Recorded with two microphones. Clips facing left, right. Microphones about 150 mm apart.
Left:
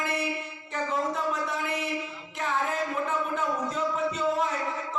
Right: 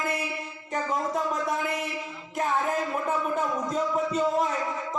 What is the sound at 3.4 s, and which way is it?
Music, 35° right (ahead or behind).